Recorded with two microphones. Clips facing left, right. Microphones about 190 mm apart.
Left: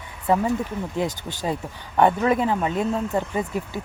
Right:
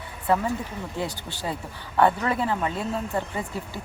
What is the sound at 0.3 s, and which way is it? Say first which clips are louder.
Speech: left 3 dB; 15° left (ahead or behind).